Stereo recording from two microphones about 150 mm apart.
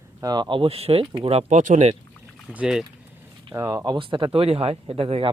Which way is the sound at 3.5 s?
25° right (ahead or behind).